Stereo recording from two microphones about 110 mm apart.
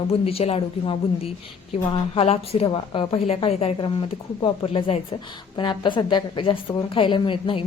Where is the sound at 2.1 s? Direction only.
65° left (ahead or behind).